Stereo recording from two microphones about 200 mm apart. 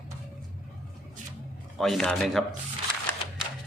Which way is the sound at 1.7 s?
Centre (ahead or behind).